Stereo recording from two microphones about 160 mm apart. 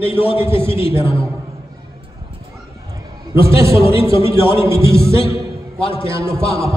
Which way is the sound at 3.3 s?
15° right (ahead or behind).